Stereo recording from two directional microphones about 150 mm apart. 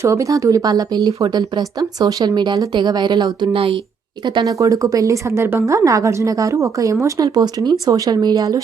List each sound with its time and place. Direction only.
0.0 s a woman's voice: 20° right (ahead or behind); by 3.8 s 35° right (ahead or behind)
4.4 s a woman's voice: 25° right (ahead or behind)